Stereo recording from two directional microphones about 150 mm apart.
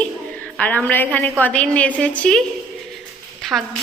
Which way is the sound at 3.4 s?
Centre (ahead or behind).